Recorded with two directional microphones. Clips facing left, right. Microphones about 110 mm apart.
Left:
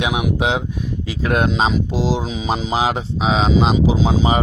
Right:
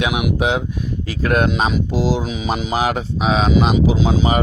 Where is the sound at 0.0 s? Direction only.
30° left (ahead or behind).